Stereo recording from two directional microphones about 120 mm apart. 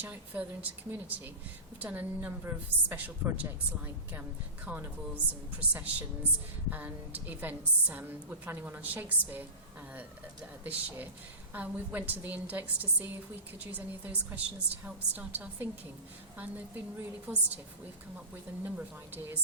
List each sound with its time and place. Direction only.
0.0 s a woman's voice: 15° right (ahead or behind)
10.6 s a woman's voice: 15° right (ahead or behind)
18.6 s a woman's voice: 15° right (ahead or behind)